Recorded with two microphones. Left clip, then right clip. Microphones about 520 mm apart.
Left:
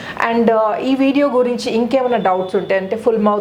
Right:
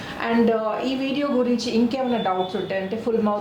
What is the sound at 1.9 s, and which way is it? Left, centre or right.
Speech, left.